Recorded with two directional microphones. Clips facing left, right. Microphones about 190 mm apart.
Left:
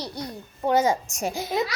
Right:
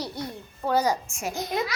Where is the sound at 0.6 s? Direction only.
20° left (ahead or behind).